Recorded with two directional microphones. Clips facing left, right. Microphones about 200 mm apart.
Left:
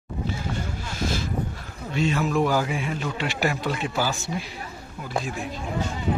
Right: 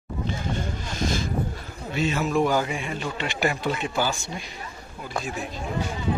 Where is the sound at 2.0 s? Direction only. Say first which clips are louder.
Even; centre (ahead or behind).